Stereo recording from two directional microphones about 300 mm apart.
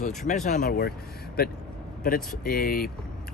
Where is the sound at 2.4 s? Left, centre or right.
Left.